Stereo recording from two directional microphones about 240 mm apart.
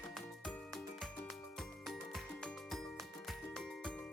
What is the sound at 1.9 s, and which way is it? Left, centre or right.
Music, centre.